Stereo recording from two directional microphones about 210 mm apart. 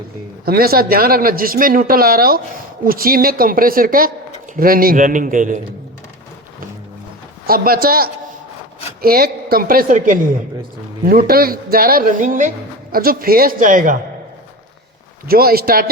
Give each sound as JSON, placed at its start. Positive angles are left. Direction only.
{"t": 0.4, "sound": "a man's voice", "side_deg": -45}
{"t": 7.4, "sound": "speech", "side_deg": -45}
{"t": 15.3, "sound": "speech", "side_deg": -45}